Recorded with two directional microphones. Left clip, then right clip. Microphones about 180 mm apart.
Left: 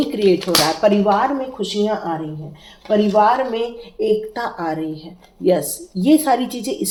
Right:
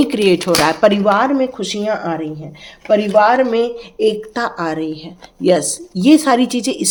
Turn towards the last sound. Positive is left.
turn(degrees=-55)  # may be behind; listen again after turning